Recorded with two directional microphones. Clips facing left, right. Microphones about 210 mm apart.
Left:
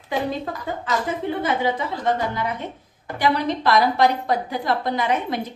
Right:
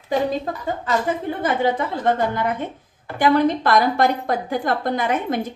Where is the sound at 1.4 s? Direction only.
50° right (ahead or behind).